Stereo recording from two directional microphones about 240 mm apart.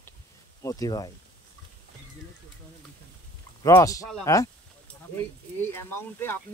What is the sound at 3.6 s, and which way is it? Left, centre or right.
Speech, centre.